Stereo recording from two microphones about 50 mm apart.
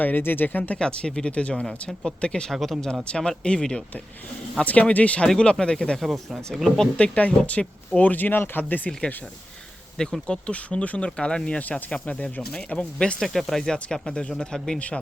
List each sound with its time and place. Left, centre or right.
0.0 s speech: left
0.8 s speech: centre
1.6 s speech: centre
2.2 s speech: centre
2.5 s speech: centre
3.1 s speech: centre
4.6 s speech: left
6.0 s speech: centre
6.9 s speech: left
10.0 s speech: centre
13.2 s speech: centre
14.8 s speech: left